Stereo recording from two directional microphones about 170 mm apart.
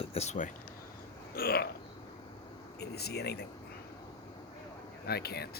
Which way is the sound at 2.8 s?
70° left (ahead or behind).